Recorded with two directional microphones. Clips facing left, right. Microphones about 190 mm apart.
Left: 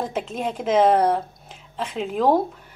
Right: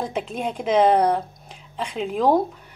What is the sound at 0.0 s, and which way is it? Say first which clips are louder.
A woman's voice: even; centre (ahead or behind).